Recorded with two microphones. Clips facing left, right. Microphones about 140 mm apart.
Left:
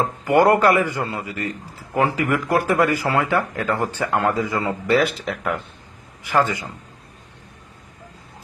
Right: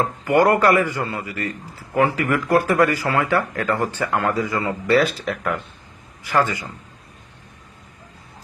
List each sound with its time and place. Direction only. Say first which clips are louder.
0.3 s a man's voice: left 1 dB; 20° left (ahead or behind)